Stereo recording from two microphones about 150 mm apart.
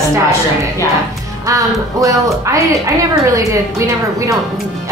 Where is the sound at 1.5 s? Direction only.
20° right (ahead or behind).